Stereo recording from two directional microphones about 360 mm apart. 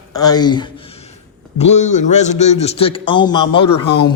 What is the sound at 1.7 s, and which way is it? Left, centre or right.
A man's voice, centre.